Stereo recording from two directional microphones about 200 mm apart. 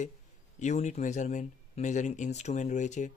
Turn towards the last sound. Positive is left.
turn(degrees=35)  # may be behind; listen again after turning